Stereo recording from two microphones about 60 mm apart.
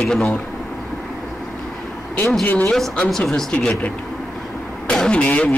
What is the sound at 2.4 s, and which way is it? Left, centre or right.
Speech, left.